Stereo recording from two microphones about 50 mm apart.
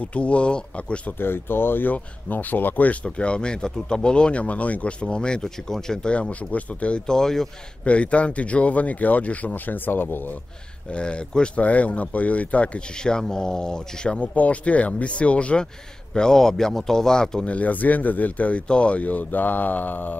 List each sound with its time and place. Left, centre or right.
0.0 s speech: left
1.1 s speech: left
5.0 s speech: centre
6.1 s speech: left
7.1 s speech: centre
7.8 s speech: left
10.9 s speech: left
13.0 s speech: centre
17.5 s speech: left